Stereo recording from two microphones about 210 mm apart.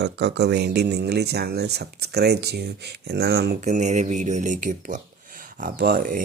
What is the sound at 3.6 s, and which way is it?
Speech, 35° right (ahead or behind).